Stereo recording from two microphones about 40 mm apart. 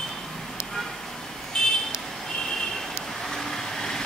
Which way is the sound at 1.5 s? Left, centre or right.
Centre.